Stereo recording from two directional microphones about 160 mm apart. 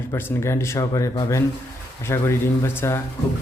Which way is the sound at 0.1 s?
15° left (ahead or behind).